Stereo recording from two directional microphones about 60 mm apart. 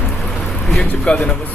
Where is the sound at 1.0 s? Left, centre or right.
Centre.